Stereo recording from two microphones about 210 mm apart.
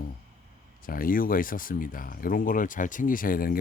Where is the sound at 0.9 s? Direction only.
45° left (ahead or behind).